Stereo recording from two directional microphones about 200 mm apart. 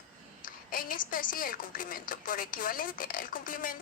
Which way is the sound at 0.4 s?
45° left (ahead or behind).